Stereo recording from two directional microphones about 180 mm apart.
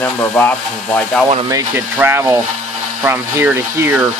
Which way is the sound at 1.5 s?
10° right (ahead or behind).